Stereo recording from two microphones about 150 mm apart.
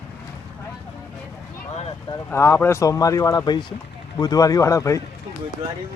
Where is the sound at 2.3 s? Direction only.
15° left (ahead or behind).